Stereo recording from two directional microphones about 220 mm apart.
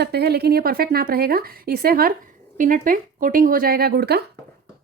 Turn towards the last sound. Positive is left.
turn(degrees=-45)  # may be behind; listen again after turning